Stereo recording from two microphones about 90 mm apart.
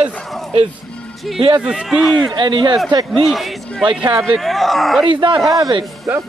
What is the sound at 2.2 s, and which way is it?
Speech, 60° right (ahead or behind).